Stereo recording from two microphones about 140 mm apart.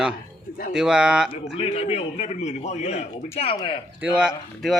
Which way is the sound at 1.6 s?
45° left (ahead or behind).